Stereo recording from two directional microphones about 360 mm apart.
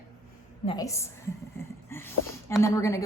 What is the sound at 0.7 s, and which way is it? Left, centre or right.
A woman's voice, centre.